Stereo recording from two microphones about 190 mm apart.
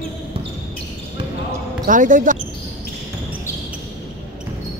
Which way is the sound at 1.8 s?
45° right (ahead or behind).